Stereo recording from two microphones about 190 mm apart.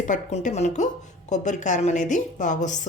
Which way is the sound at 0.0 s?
35° left (ahead or behind).